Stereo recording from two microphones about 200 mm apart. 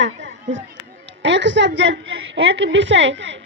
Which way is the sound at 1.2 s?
65° right (ahead or behind).